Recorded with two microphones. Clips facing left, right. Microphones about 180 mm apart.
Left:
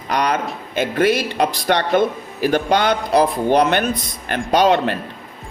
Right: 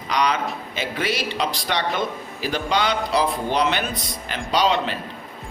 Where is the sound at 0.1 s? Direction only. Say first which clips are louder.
Left 2 dB; 50° left (ahead or behind).